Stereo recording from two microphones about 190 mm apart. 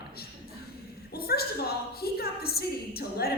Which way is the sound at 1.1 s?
55° left (ahead or behind).